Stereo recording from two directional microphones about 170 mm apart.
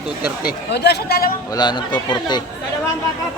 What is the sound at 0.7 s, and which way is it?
Speech, 75° left (ahead or behind).